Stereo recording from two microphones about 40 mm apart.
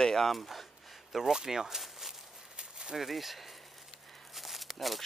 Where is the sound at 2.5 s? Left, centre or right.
Right.